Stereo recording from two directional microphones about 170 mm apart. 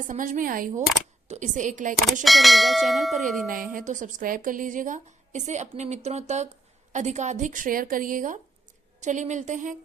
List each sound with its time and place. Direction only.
0.1 s a woman's voice: 50° right (ahead or behind)
2.2 s bell: centre (ahead or behind)
3.5 s a woman's voice: 55° right (ahead or behind)